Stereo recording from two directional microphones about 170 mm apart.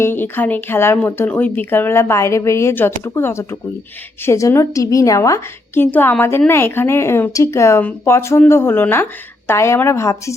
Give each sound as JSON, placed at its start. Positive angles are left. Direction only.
{"t": 0.0, "sound": "speech", "side_deg": 10}